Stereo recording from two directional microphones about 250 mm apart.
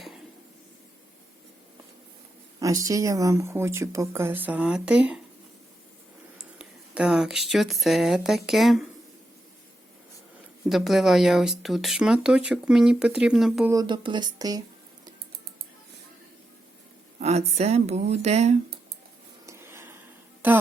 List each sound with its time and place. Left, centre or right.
2.6 s speech: centre
6.4 s speech: centre
10.7 s speech: centre
13.7 s speech: centre
17.2 s speech: right
19.5 s a sound: centre
20.4 s speech: centre